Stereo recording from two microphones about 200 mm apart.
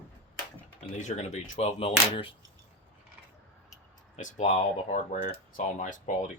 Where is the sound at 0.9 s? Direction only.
35° left (ahead or behind).